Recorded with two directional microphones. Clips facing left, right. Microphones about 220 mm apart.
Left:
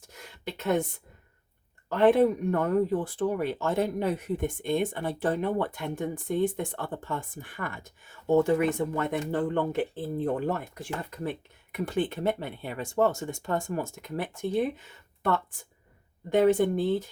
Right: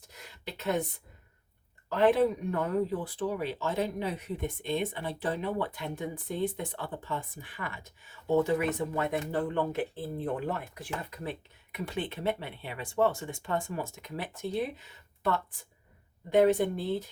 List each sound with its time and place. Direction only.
0.1 s a sound: 50° left (ahead or behind)
1.9 s speech: 50° left (ahead or behind)
16.3 s speech: 50° left (ahead or behind)